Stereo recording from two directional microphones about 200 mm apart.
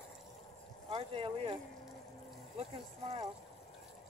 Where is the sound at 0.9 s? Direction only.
30° right (ahead or behind).